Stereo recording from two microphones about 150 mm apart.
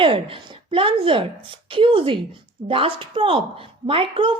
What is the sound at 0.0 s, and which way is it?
Speech, 35° right (ahead or behind).